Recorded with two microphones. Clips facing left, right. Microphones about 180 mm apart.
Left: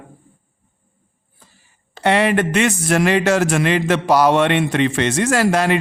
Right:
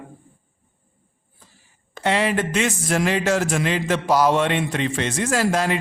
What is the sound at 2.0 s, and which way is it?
A man's voice, 65° left (ahead or behind).